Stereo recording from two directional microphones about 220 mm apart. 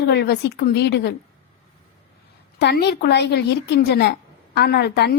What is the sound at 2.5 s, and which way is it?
A woman's voice, 45° left (ahead or behind).